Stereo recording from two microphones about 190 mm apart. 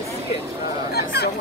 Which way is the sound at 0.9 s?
55° left (ahead or behind).